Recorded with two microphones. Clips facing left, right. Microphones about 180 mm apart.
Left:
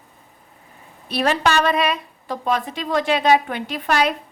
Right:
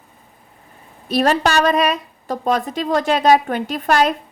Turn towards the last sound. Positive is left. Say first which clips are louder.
# right 3 dB
turn(degrees=-45)  # may be behind; listen again after turning